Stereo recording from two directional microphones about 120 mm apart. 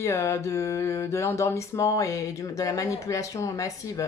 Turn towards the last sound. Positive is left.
turn(degrees=25)  # may be behind; listen again after turning